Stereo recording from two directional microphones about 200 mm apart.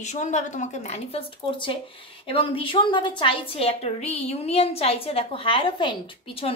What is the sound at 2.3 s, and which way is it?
A woman's voice, 25° left (ahead or behind).